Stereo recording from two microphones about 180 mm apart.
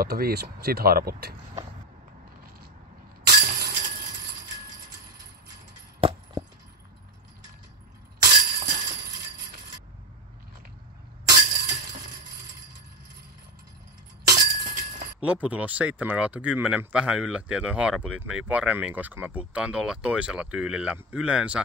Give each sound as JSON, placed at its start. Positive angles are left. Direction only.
{"t": 0.0, "sound": "speech", "side_deg": -60}
{"t": 3.3, "sound": "breaking", "side_deg": -50}
{"t": 5.9, "sound": "a sound", "side_deg": -30}
{"t": 8.2, "sound": "shatter", "side_deg": -60}
{"t": 11.4, "sound": "glass", "side_deg": -50}
{"t": 14.2, "sound": "breaking", "side_deg": -55}
{"t": 15.1, "sound": "speech", "side_deg": -5}